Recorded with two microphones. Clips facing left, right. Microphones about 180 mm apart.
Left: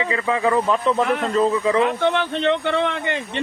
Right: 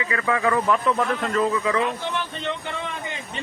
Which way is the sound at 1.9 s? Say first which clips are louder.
Left 8 dB; 60° left (ahead or behind).